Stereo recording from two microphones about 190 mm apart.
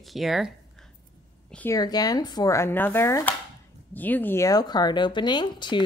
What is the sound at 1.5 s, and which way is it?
Speech, 10° left (ahead or behind).